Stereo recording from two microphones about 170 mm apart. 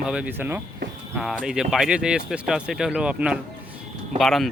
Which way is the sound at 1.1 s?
Centre (ahead or behind).